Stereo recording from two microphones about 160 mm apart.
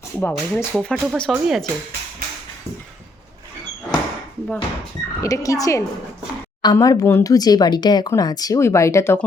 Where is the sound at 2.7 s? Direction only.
20° right (ahead or behind).